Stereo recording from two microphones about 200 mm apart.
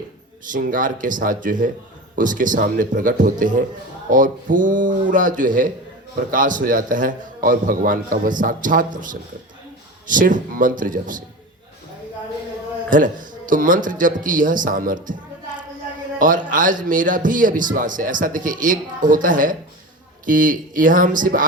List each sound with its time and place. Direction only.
0.5 s a man's voice: 40° right (ahead or behind)
12.9 s a man's voice: 40° right (ahead or behind)
16.5 s a man's voice: 40° right (ahead or behind)